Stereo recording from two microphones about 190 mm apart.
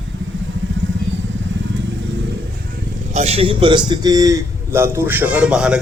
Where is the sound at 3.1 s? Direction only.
35° right (ahead or behind); by 5.8 s 5° right (ahead or behind).